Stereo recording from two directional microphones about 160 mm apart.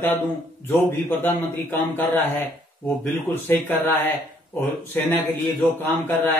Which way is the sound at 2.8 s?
10° left (ahead or behind).